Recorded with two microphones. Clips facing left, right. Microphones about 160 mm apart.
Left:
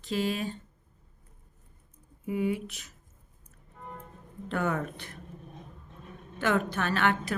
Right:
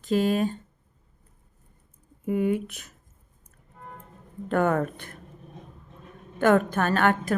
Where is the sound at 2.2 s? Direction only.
50° right (ahead or behind).